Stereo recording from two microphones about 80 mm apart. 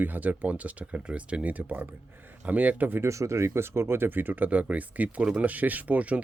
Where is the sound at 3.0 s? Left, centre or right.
Right.